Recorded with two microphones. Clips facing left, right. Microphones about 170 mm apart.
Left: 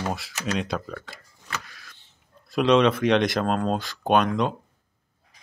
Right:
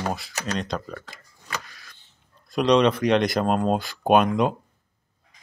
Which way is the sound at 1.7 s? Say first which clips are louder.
Left 1 dB; centre (ahead or behind).